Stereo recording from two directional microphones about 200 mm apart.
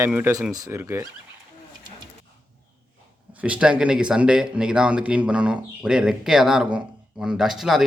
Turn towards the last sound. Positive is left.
turn(degrees=0)  # may be behind; listen again after turning